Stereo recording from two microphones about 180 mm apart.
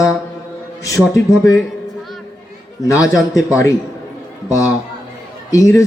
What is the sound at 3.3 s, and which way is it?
Speech, 15° left (ahead or behind).